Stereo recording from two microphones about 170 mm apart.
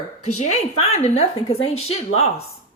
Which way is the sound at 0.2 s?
40° left (ahead or behind).